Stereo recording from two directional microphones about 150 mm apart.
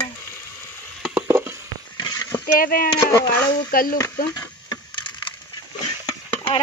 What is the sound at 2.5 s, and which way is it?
Speech, 70° left (ahead or behind).